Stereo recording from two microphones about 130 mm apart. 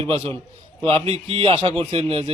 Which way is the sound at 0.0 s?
50° right (ahead or behind).